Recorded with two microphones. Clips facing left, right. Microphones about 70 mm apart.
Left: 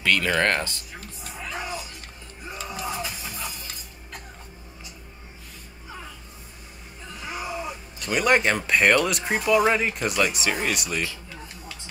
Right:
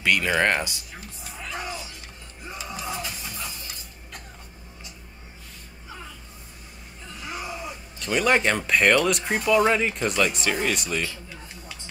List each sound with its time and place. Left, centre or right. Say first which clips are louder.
0.0 s speech: even; centre
1.4 s music: left 1 dB; centre
3.0 s music: left 1 dB; centre
7.2 s a sound: left 2 dB; centre
8.0 s speech: even; centre